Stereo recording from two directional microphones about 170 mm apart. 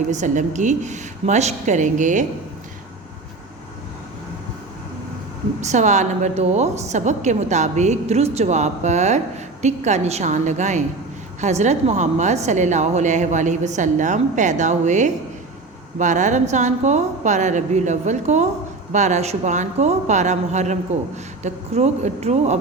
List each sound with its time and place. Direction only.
0.1 s a woman's voice: 45° right (ahead or behind)
5.5 s a woman's voice: 45° right (ahead or behind)